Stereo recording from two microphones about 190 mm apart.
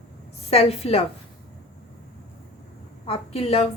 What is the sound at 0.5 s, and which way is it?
Speech, 30° left (ahead or behind).